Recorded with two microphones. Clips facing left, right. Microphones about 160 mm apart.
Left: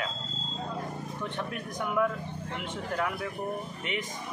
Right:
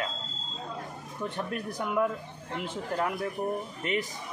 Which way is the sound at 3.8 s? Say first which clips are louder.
Right 4 dB; 40° right (ahead or behind).